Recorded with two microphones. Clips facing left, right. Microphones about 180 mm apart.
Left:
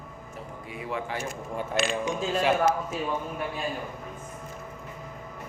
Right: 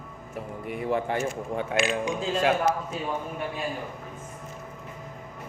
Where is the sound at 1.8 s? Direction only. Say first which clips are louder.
Right 1 dB; 5° right (ahead or behind).